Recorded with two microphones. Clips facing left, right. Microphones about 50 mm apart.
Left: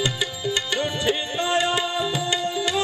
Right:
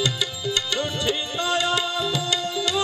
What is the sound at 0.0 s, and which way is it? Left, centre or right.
Tabla, left.